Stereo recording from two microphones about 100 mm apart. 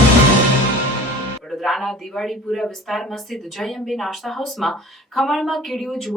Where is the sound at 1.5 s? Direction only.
Centre (ahead or behind).